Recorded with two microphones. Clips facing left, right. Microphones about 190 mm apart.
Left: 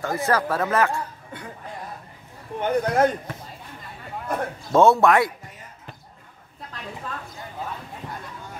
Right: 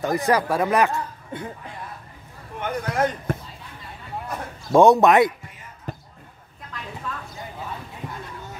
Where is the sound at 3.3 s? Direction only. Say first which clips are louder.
Right 9 dB; 50° right (ahead or behind).